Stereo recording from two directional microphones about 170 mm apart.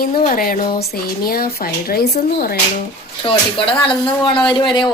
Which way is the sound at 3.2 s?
30° left (ahead or behind).